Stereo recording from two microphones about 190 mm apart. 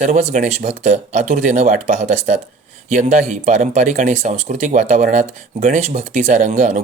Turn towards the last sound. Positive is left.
turn(degrees=-40)  # may be behind; listen again after turning